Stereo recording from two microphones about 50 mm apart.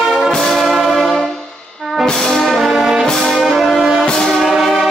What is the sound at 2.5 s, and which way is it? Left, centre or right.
Brass instrument, centre.